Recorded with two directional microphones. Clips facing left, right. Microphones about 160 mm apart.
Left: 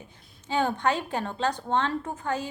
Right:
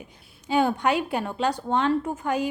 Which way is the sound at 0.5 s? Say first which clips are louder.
Right 4 dB; 10° right (ahead or behind).